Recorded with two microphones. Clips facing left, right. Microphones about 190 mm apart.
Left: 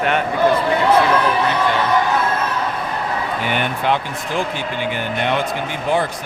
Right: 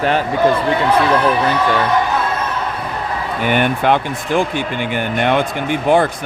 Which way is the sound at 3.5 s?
55° right (ahead or behind).